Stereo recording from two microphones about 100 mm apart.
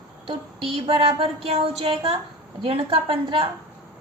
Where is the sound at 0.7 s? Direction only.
80° right.